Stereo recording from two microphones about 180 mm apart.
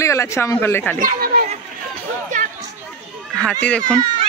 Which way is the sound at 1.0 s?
50° right (ahead or behind).